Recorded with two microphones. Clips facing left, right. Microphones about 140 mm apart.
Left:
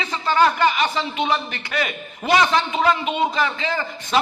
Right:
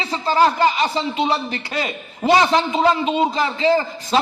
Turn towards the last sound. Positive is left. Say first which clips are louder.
# right 4 dB
turn(degrees=-30)  # may be behind; listen again after turning